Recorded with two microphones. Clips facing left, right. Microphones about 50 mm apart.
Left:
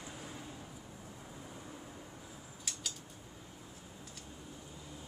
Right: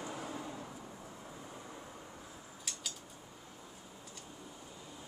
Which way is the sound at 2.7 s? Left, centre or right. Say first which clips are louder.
Left 1 dB; centre.